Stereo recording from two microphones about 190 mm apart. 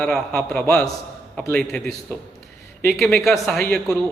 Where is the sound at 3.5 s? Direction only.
50° right (ahead or behind).